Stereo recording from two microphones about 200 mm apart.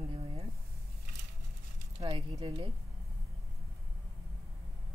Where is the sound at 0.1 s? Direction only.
25° right (ahead or behind).